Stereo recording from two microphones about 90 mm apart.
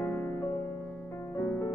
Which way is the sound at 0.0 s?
30° left (ahead or behind).